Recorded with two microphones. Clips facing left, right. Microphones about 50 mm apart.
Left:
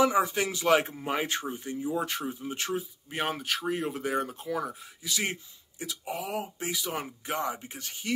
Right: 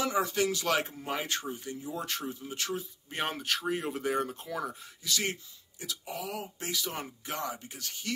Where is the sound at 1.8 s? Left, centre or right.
Centre.